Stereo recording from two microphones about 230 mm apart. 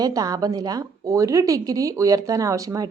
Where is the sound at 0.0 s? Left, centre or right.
Centre.